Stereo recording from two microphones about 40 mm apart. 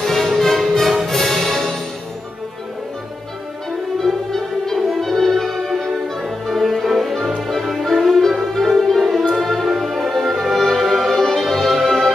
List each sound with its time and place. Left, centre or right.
0.0 s music: centre
4.0 s music: centre